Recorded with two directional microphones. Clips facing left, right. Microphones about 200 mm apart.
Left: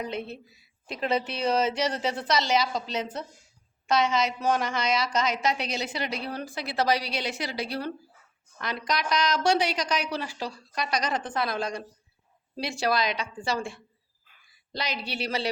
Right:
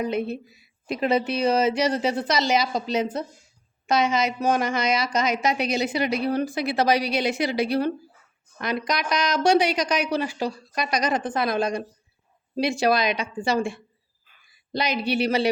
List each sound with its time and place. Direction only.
0.0 s a woman's voice: 10° right (ahead or behind)